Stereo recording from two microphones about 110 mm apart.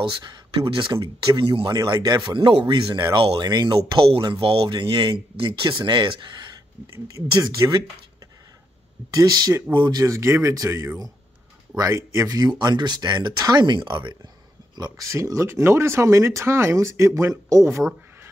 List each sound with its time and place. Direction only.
0.2 s speech: 45° right (ahead or behind)
3.3 s speech: 40° right (ahead or behind)
7.2 s speech: 30° right (ahead or behind)
9.1 s speech: 35° right (ahead or behind)
14.8 s speech: 30° right (ahead or behind)